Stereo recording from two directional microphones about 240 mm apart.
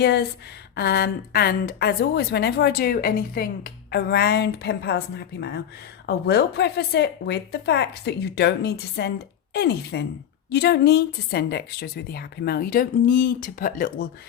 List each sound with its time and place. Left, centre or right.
0.0 s a woman's voice: left